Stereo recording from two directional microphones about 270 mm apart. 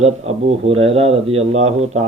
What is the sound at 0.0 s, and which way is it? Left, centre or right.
A man's voice, right.